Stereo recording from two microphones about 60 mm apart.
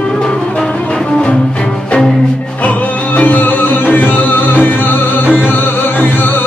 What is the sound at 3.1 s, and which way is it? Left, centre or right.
Music, left.